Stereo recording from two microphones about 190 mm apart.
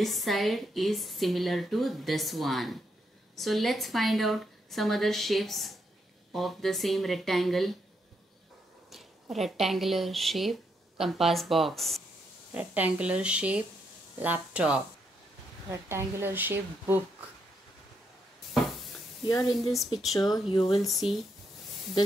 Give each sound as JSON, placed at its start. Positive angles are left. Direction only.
{"t": 0.0, "sound": "a woman's voice", "side_deg": 0}
{"t": 8.9, "sound": "a woman's voice", "side_deg": 0}
{"t": 19.5, "sound": "a woman's voice", "side_deg": 0}
{"t": 20.3, "sound": "speech", "side_deg": 20}
{"t": 21.0, "sound": "a woman's voice", "side_deg": 0}